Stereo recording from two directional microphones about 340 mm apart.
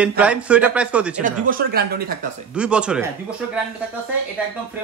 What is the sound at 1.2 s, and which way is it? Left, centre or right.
Speech, right.